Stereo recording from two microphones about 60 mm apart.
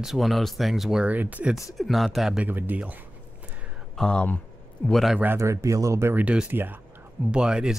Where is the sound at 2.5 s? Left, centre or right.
Right.